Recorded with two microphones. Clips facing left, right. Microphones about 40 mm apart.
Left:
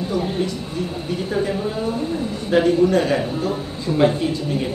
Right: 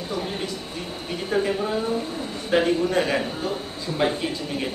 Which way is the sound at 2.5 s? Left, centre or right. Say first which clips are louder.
Left 5 dB; centre.